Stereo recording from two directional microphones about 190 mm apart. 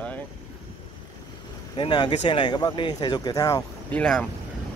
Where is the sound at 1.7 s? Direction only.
25° left (ahead or behind).